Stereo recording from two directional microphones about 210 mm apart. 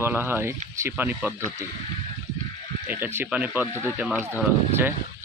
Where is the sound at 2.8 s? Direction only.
10° right (ahead or behind).